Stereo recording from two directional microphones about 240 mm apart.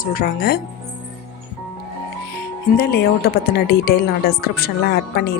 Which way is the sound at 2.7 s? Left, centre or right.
Left.